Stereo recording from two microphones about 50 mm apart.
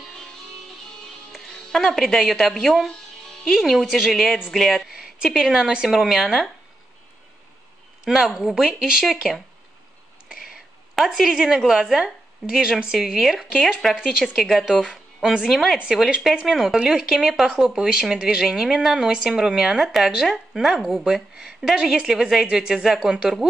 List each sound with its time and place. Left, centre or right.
1.5 s a woman's voice: centre
8.0 s speech: centre
10.2 s a sound: centre
11.0 s speech: centre
22.6 s speech: right